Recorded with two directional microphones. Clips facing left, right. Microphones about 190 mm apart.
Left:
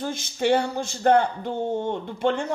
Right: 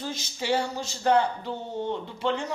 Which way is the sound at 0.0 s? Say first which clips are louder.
Left 8 dB; 50° left (ahead or behind).